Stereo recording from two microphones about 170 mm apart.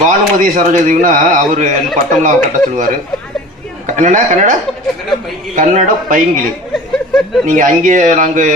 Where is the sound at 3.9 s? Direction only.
45° right (ahead or behind).